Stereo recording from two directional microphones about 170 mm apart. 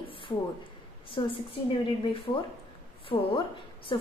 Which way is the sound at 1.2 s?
25° left (ahead or behind).